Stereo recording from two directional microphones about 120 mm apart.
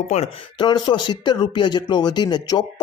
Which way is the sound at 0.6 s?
40° left (ahead or behind).